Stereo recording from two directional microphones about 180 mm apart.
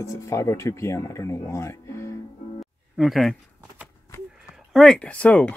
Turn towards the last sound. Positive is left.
turn(degrees=5)  # may be behind; listen again after turning